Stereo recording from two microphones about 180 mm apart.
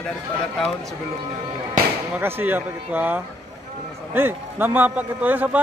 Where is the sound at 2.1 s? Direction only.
10° right (ahead or behind).